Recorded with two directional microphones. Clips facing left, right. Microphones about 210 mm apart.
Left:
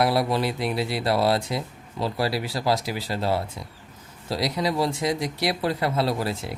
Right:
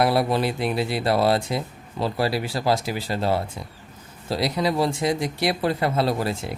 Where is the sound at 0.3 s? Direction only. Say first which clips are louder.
Right 2 dB; 55° right (ahead or behind).